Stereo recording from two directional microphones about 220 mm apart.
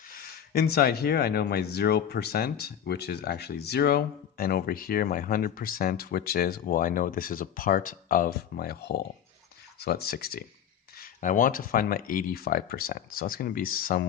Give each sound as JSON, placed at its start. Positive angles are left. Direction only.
{"t": 0.1, "sound": "speech", "side_deg": 45}